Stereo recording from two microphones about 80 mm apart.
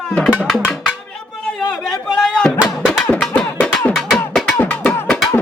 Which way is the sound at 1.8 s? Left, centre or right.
Centre.